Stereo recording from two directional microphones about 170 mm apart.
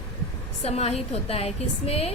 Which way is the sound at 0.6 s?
40° left (ahead or behind).